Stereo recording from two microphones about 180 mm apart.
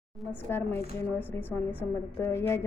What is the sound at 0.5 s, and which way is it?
A woman's voice, 10° left (ahead or behind).